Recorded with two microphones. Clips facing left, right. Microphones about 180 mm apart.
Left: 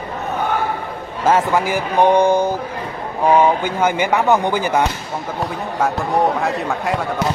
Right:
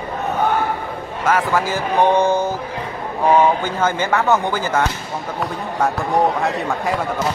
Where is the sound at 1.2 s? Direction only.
20° left (ahead or behind).